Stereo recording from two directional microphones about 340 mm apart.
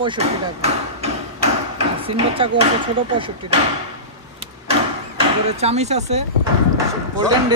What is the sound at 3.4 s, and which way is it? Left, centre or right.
Speech, right.